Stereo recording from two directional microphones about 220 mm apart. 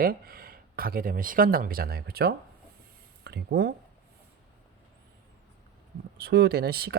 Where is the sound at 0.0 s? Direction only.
40° right (ahead or behind).